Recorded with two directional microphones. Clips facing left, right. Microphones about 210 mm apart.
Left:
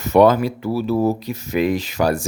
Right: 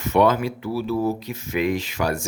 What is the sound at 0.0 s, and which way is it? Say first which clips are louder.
Speech: left 5 dB; 40° left (ahead or behind).